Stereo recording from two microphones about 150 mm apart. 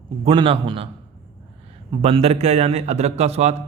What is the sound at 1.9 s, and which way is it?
Speech, 40° right (ahead or behind).